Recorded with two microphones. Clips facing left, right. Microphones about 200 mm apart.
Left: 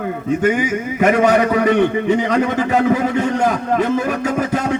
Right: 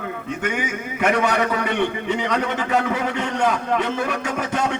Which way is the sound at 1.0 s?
40° left (ahead or behind).